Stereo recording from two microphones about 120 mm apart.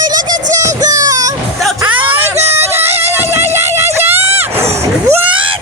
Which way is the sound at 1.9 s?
15° right (ahead or behind).